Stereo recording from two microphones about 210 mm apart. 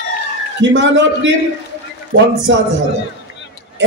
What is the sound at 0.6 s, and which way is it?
Music, 60° right (ahead or behind).